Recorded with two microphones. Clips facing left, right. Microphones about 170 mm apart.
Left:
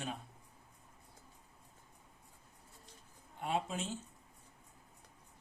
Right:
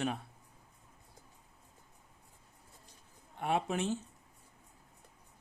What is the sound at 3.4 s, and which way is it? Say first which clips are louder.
Speech: right 5 dB; 65° right (ahead or behind).